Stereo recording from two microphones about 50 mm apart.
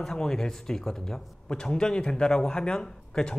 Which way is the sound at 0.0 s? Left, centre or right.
Centre.